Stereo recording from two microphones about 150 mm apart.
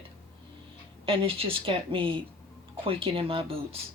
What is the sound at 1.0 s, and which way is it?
Speech, 40° right (ahead or behind).